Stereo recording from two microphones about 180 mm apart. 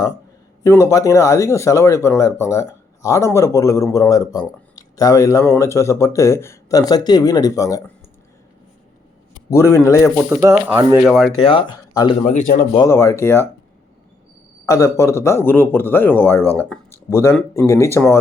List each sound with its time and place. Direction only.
0.6 s speech: 20° left (ahead or behind)
9.5 s speech: 15° left (ahead or behind)
10.2 s speech: 15° right (ahead or behind)
11.0 s speech: centre (ahead or behind)
11.3 s speech: 25° left (ahead or behind)
12.2 s speech: 45° left (ahead or behind)
12.7 s speech: 20° left (ahead or behind)
14.7 s speech: 15° left (ahead or behind)